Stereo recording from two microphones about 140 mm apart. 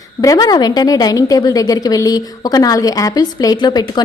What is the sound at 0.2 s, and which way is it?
A woman's voice, 25° left (ahead or behind).